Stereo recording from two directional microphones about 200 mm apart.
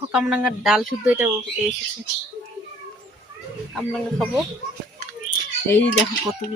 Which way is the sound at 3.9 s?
Centre (ahead or behind).